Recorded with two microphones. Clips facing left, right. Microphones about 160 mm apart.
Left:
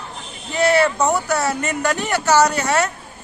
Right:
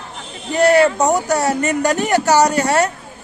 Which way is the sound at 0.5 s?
40° right (ahead or behind).